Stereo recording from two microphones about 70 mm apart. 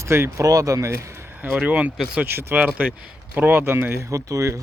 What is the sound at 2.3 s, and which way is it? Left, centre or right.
Speech, right.